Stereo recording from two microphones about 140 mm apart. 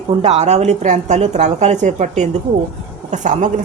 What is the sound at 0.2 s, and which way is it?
A woman's voice, 55° right (ahead or behind).